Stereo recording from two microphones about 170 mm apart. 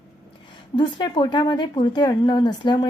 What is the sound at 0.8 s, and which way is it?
Speech, 25° left (ahead or behind).